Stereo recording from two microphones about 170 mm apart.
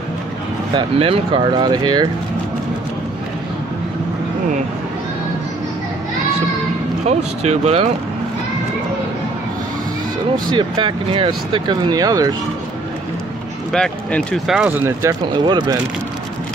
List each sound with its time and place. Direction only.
0.7 s speech: 35° right (ahead or behind)
7.1 s speech: 40° right (ahead or behind)
10.5 s speech: 30° right (ahead or behind)
13.7 s speech: 5° left (ahead or behind)
14.7 s speech: 15° right (ahead or behind)